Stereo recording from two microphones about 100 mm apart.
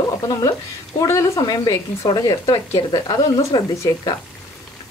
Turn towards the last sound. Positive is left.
turn(degrees=35)  # may be behind; listen again after turning